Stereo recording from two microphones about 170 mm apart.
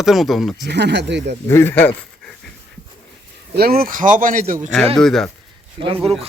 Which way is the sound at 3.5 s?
60° right (ahead or behind).